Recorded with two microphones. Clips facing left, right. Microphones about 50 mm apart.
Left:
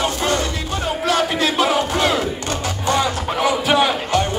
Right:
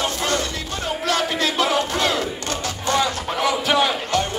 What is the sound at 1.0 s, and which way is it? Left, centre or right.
Battle cry, centre.